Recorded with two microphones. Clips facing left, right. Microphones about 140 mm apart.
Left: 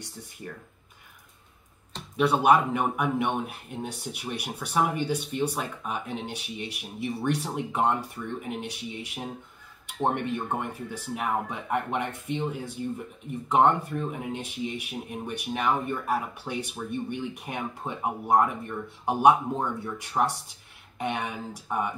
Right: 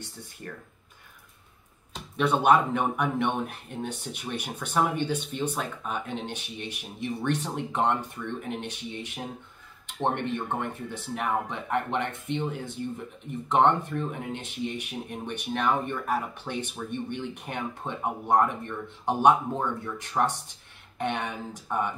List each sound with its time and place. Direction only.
2.1 s speech: 5° left (ahead or behind)
13.5 s speech: 10° left (ahead or behind)